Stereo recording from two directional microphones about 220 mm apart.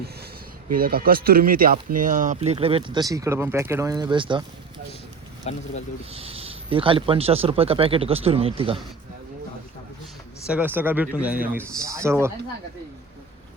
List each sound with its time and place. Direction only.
0.7 s speech: 40° right (ahead or behind); by 4.4 s 20° right (ahead or behind)
5.5 s speech: 30° left (ahead or behind)
6.1 s speech: 25° right (ahead or behind)
10.5 s speech: 10° right (ahead or behind)